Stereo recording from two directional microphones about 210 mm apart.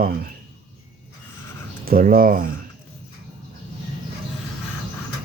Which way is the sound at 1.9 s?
40° right (ahead or behind).